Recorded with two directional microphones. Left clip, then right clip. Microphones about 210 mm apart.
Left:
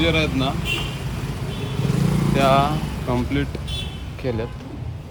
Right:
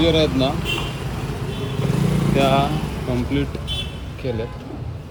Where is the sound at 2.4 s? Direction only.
10° left (ahead or behind).